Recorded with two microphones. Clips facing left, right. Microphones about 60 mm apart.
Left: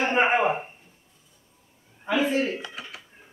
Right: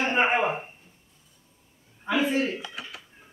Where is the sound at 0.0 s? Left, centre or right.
Centre.